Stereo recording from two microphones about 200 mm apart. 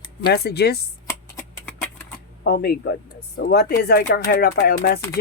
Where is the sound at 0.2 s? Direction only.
55° left (ahead or behind).